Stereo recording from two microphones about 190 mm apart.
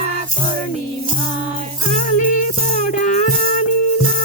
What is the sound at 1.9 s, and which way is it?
Music, 40° left (ahead or behind).